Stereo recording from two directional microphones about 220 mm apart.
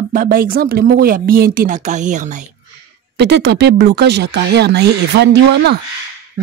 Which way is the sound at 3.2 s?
50° right (ahead or behind).